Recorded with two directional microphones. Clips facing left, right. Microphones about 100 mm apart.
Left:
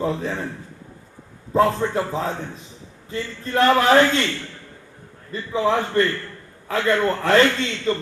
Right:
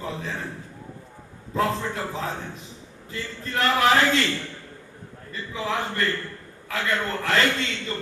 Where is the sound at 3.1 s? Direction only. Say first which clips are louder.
Left 5 dB; 30° left (ahead or behind).